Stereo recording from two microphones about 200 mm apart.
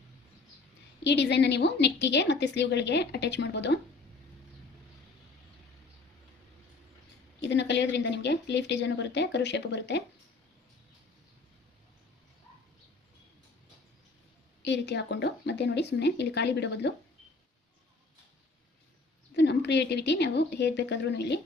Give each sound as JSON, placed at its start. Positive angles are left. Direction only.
{"t": 1.0, "sound": "a woman's voice", "side_deg": 60}
{"t": 7.4, "sound": "a woman's voice", "side_deg": 60}
{"t": 14.6, "sound": "a woman's voice", "side_deg": 60}
{"t": 19.3, "sound": "a woman's voice", "side_deg": 60}